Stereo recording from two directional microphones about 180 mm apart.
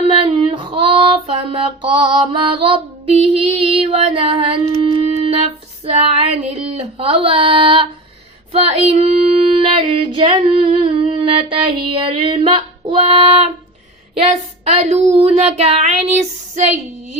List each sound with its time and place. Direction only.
0.2 s female singing: 25° right (ahead or behind)
8.5 s child singing: 35° right (ahead or behind)
14.6 s child singing: 35° right (ahead or behind)